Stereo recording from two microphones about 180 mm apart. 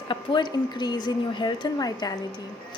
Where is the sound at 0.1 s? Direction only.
25° left (ahead or behind).